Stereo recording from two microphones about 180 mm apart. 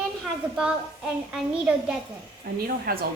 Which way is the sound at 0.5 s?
5° right (ahead or behind).